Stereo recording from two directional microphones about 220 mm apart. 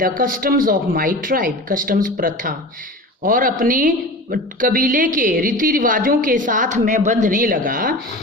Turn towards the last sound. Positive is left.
turn(degrees=-40)  # may be behind; listen again after turning